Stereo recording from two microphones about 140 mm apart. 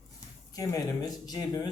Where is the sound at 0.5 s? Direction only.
25° left (ahead or behind).